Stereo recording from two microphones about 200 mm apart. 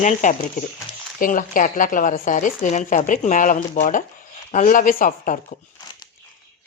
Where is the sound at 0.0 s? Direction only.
40° left (ahead or behind).